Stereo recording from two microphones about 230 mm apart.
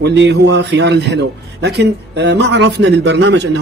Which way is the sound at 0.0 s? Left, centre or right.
Right.